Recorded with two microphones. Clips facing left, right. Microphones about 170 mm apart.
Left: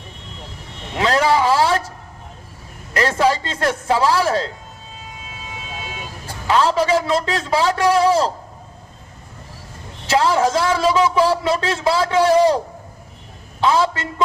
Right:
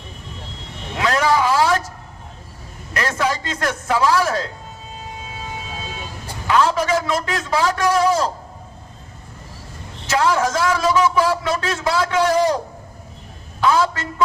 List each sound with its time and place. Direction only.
0.9 s a sound: 30° left (ahead or behind)
2.9 s a man's voice: 30° left (ahead or behind)
6.5 s a man's voice: 30° left (ahead or behind)
10.1 s a man's voice: 30° left (ahead or behind)
13.6 s a man's voice: 25° left (ahead or behind)